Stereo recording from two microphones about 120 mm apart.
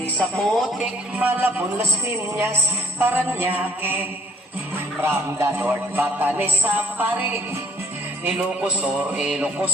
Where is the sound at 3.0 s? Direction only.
15° right (ahead or behind).